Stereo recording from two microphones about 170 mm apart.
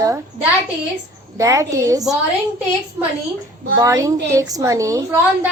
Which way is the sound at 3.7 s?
20° right (ahead or behind).